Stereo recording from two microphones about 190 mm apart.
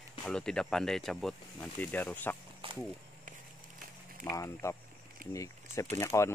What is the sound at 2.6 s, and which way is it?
Speech, 30° right (ahead or behind).